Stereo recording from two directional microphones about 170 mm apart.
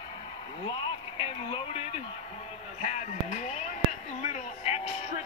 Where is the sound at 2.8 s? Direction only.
45° left (ahead or behind).